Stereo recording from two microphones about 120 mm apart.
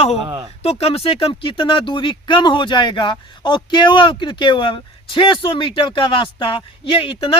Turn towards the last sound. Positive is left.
turn(degrees=45)  # may be behind; listen again after turning